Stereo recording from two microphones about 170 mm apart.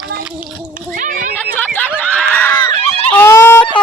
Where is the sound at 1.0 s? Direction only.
50° right (ahead or behind).